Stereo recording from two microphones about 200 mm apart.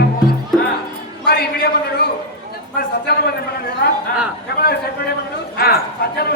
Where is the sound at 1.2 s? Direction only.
50° left (ahead or behind).